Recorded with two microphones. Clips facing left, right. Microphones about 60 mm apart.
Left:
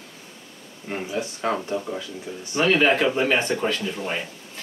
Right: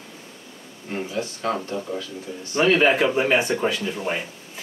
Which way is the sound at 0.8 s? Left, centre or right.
Centre.